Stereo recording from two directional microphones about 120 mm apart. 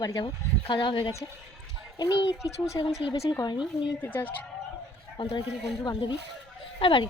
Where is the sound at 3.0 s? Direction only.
45° left (ahead or behind).